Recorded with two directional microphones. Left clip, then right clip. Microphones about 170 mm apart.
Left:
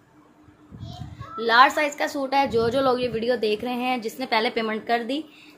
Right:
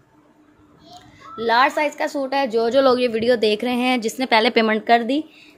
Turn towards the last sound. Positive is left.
turn(degrees=-55)  # may be behind; listen again after turning